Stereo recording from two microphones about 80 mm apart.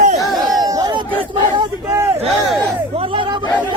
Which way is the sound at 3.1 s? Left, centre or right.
Right.